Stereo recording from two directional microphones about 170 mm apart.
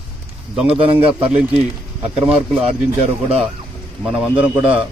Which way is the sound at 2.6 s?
35° right (ahead or behind).